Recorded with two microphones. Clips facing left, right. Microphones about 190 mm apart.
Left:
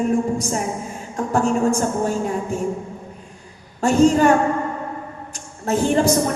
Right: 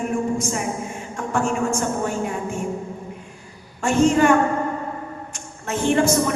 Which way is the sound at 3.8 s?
35° left (ahead or behind).